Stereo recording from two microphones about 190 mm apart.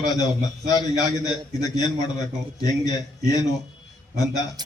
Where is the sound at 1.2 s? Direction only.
20° left (ahead or behind).